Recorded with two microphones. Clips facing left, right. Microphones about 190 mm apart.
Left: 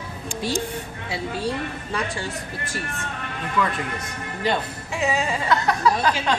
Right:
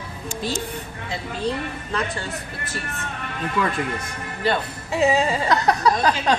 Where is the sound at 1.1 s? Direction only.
10° left (ahead or behind).